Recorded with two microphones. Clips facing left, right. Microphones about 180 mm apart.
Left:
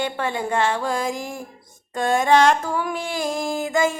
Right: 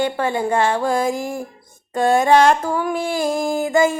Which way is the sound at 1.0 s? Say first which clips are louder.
Right 5 dB; 5° right (ahead or behind).